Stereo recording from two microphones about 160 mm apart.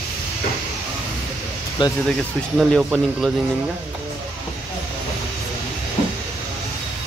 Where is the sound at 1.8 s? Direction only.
30° left (ahead or behind).